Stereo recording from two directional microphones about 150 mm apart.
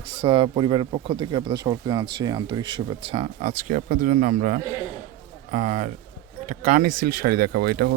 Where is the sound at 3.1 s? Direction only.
50° right (ahead or behind).